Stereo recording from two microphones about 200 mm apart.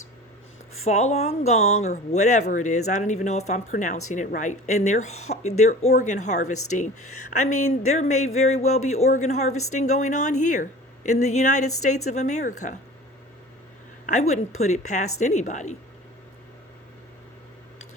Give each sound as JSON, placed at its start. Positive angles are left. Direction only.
{"t": 0.9, "sound": "speech", "side_deg": 35}
{"t": 14.1, "sound": "speech", "side_deg": 35}